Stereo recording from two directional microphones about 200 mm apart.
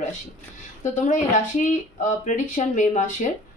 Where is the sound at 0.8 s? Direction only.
40° left (ahead or behind).